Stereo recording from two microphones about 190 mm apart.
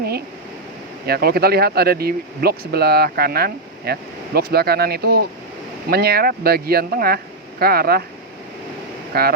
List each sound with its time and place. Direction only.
1.0 s speech: 55° right (ahead or behind)
9.1 s speech: 55° right (ahead or behind)